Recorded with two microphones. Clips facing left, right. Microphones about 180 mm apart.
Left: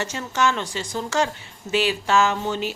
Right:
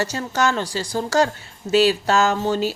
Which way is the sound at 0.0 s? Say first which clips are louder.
Right 2 dB; 35° right (ahead or behind).